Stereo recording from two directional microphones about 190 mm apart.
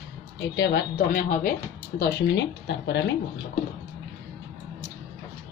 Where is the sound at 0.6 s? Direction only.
60° left (ahead or behind).